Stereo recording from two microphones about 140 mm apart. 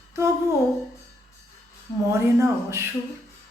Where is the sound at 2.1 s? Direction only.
20° right (ahead or behind).